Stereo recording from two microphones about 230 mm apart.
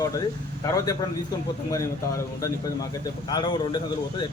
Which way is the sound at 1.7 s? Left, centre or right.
Centre.